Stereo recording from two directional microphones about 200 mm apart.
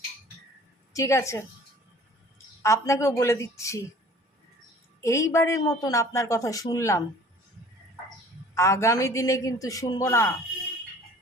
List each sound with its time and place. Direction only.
0.9 s a woman's voice: 15° left (ahead or behind)
2.6 s a woman's voice: 15° left (ahead or behind)
4.9 s a woman's voice: 15° left (ahead or behind)
8.5 s a woman's voice: 15° left (ahead or behind)